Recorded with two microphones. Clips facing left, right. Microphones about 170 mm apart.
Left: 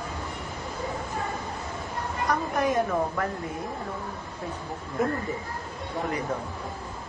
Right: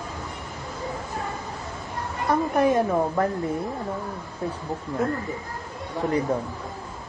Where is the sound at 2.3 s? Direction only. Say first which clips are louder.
Right 6 dB; 30° right (ahead or behind).